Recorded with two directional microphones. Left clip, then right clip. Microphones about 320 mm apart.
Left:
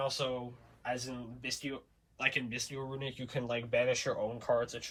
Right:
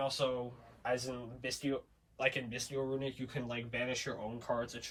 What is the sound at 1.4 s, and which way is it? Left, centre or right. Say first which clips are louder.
Speech: right 2 dB; centre.